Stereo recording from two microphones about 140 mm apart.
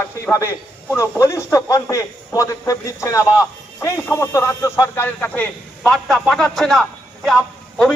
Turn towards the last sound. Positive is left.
turn(degrees=5)  # may be behind; listen again after turning